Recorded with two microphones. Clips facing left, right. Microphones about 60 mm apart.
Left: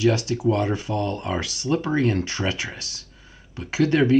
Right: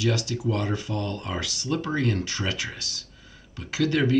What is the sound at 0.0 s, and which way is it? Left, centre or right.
Speech, left.